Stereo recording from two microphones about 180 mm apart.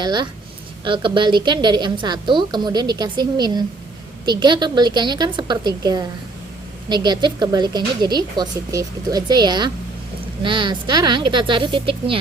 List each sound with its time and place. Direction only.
0.0 s speech: 25° right (ahead or behind)